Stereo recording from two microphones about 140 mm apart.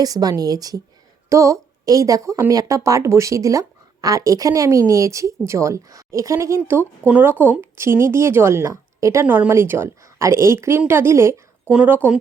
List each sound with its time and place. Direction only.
0.0 s a woman's voice: 25° right (ahead or behind)
9.2 s a woman's voice: 10° right (ahead or behind)
11.7 s a woman's voice: 10° right (ahead or behind)